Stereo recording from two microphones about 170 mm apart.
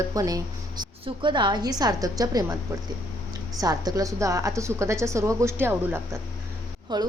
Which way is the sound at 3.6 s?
20° right (ahead or behind).